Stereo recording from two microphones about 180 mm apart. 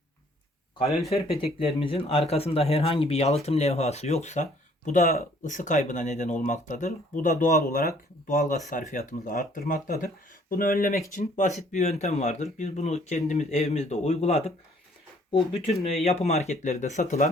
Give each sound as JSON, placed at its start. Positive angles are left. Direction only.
{"t": 1.5, "sound": "speech", "side_deg": 30}
{"t": 4.9, "sound": "speech", "side_deg": 50}